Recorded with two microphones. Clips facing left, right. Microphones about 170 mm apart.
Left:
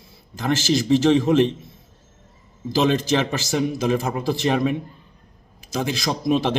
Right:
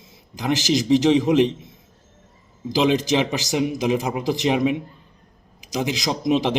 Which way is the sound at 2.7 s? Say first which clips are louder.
Right 1 dB; 15° right (ahead or behind).